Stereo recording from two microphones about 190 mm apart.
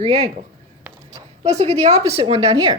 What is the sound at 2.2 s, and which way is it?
Speech, 20° right (ahead or behind).